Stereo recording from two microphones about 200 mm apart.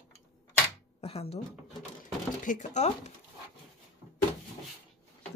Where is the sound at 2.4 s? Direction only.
40° left (ahead or behind).